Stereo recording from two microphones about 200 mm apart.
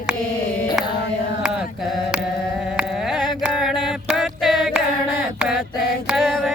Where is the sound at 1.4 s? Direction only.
5° right (ahead or behind).